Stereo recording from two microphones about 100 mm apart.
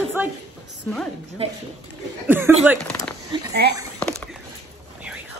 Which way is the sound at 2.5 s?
20° right (ahead or behind).